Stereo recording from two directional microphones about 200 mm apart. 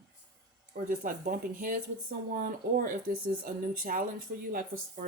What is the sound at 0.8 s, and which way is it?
Speech, 40° right (ahead or behind).